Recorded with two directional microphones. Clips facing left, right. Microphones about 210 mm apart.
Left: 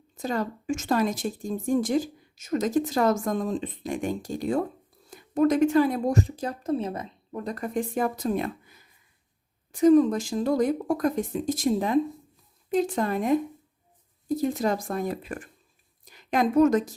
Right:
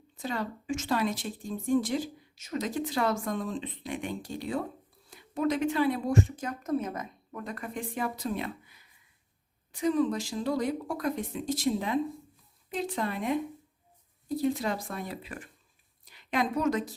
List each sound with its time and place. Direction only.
0.2 s a woman's voice: 45° left (ahead or behind)